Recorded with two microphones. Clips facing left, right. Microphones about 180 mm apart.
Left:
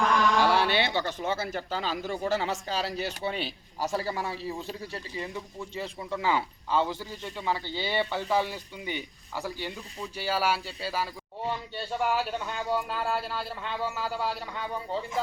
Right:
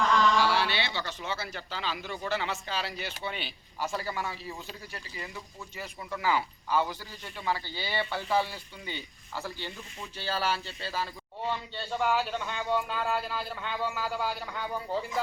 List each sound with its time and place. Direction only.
0.3 s speech: 55° left (ahead or behind); by 15.0 s centre (ahead or behind)